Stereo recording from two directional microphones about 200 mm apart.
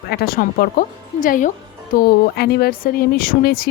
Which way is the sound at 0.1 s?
50° left (ahead or behind).